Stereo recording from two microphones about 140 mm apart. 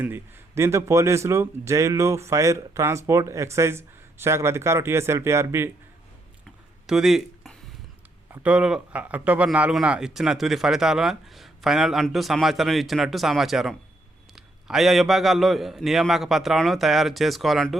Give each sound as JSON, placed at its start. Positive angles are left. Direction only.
{"t": 0.0, "sound": "speech", "side_deg": -15}
{"t": 6.8, "sound": "a man's voice", "side_deg": 0}